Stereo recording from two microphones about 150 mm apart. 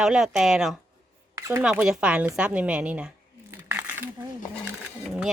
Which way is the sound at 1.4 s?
20° right (ahead or behind).